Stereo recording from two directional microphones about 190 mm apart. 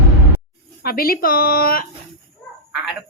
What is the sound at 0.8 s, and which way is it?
Speech, 50° left (ahead or behind).